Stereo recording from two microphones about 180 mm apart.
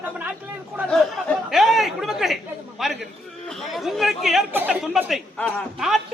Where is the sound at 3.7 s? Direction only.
Centre (ahead or behind).